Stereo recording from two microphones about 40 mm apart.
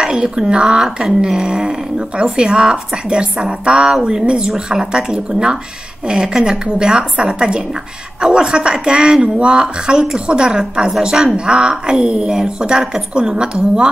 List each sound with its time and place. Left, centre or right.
0.0 s speech: centre
3.9 s speech: centre